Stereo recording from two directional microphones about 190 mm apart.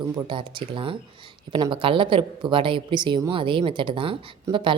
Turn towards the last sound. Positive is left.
turn(degrees=-25)  # may be behind; listen again after turning